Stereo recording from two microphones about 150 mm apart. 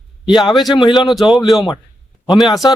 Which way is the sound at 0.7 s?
30° left (ahead or behind).